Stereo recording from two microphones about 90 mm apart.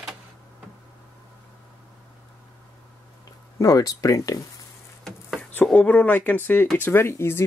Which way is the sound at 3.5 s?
40° left (ahead or behind).